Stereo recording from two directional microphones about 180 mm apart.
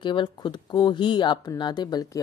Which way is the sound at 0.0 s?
25° left (ahead or behind).